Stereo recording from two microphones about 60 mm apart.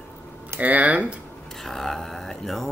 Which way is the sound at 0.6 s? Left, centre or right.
Right.